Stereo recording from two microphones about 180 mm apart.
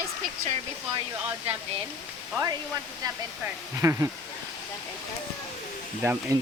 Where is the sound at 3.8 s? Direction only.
15° right (ahead or behind).